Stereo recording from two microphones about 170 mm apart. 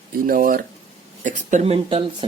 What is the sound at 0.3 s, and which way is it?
Speech, 55° right (ahead or behind).